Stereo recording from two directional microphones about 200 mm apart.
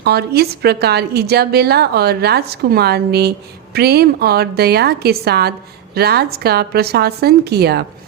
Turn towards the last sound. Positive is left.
turn(degrees=-55)  # may be behind; listen again after turning